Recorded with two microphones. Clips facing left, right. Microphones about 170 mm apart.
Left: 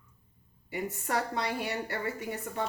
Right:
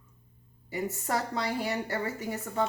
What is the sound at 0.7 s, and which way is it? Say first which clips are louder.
Speech: right 1 dB; 40° right (ahead or behind).